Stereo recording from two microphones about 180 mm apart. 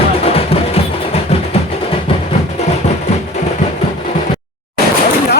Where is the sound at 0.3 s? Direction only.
35° left (ahead or behind).